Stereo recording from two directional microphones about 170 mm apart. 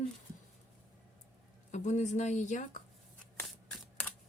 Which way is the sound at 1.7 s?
45° left (ahead or behind).